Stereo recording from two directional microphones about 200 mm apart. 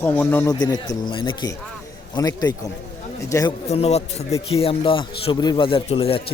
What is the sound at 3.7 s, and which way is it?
A man's voice, 30° left (ahead or behind).